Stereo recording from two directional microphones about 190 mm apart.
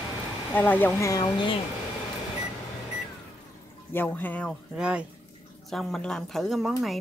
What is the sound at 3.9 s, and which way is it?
Speech, 10° left (ahead or behind).